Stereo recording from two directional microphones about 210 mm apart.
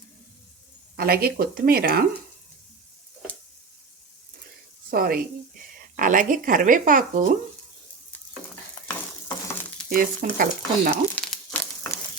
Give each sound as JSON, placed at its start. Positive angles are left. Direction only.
{"t": 0.9, "sound": "speech", "side_deg": -45}
{"t": 4.9, "sound": "speech", "side_deg": -45}
{"t": 9.9, "sound": "speech", "side_deg": -40}
{"t": 11.1, "sound": "crumpling", "side_deg": 5}